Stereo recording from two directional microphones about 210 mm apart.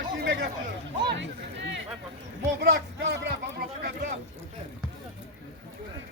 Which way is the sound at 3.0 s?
55° right (ahead or behind).